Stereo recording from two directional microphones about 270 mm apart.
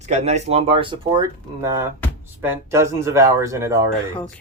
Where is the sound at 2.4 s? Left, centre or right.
Centre.